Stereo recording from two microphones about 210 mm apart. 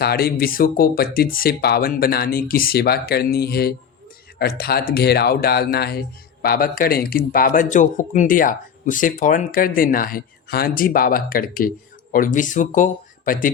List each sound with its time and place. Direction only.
0.0 s speech: 45° left (ahead or behind)